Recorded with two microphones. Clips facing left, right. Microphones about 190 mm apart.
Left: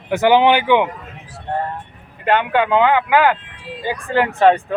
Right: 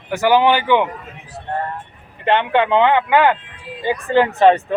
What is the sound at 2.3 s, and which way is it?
Speech, 5° left (ahead or behind).